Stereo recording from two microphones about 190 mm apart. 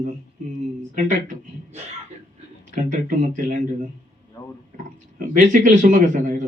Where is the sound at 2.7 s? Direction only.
40° right (ahead or behind).